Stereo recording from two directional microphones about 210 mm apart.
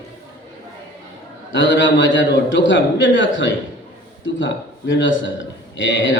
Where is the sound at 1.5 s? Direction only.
60° left (ahead or behind).